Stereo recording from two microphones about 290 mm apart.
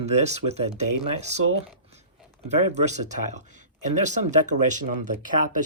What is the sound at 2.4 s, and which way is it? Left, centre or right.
Speech, right.